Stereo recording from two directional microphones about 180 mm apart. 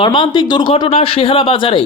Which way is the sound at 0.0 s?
25° left (ahead or behind).